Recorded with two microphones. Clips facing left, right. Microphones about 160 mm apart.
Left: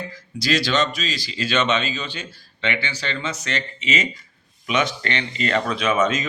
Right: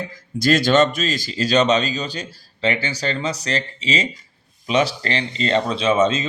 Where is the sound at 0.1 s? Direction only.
50° right (ahead or behind).